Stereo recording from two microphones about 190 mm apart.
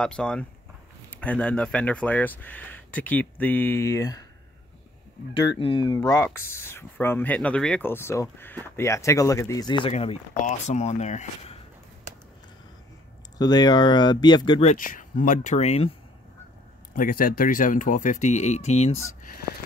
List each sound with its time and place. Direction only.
0.0 s speech: 5° left (ahead or behind)
5.5 s speech: 25° left (ahead or behind)
13.4 s speech: 20° left (ahead or behind)
14.7 s speech: 45° left (ahead or behind)
16.9 s speech: 50° left (ahead or behind)